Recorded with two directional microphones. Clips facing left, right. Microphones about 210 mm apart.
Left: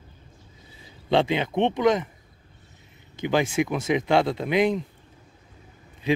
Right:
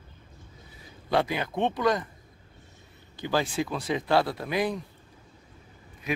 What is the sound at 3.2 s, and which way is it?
A man's voice, 20° left (ahead or behind).